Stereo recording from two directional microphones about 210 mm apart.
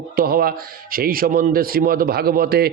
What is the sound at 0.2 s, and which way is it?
Speech, 45° right (ahead or behind).